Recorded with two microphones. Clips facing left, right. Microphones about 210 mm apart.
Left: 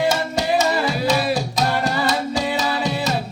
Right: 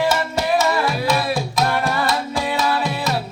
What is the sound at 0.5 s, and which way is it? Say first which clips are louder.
Music: right 1 dB; 55° right (ahead or behind).